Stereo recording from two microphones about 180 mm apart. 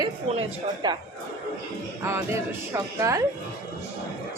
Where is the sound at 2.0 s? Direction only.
15° right (ahead or behind).